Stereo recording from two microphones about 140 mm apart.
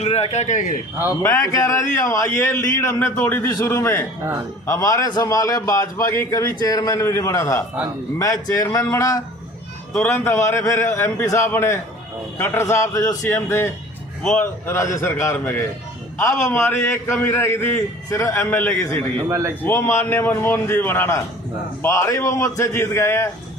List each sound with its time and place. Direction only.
0.0 s a man's voice: 50° left (ahead or behind)
1.2 s speech: 20° left (ahead or behind)
14.7 s a man's voice: 20° left (ahead or behind)
19.3 s a man's voice: 20° right (ahead or behind)
19.6 s a man's voice: 15° left (ahead or behind)